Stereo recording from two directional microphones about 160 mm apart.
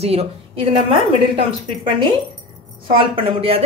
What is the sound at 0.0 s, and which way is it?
A woman's voice, 40° right (ahead or behind).